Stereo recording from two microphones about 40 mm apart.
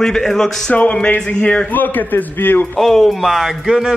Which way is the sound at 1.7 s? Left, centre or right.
Left.